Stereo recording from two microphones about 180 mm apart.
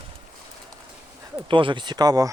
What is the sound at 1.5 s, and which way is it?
Speech, 25° right (ahead or behind).